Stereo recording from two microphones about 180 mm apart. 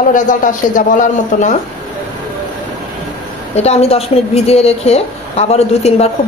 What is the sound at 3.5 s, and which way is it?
A woman's voice, 35° left (ahead or behind).